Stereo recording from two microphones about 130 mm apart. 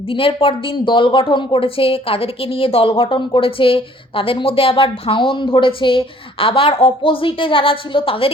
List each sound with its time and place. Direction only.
0.1 s speech: 45° left (ahead or behind)